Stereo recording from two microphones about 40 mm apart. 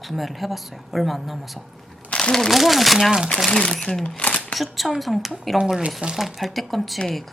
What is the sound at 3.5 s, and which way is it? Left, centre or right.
Speech, centre.